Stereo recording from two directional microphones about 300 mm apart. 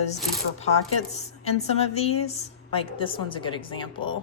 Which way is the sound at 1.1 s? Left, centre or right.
Left.